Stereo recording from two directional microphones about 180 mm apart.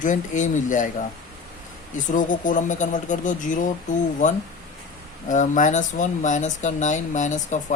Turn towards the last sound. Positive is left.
turn(degrees=40)  # may be behind; listen again after turning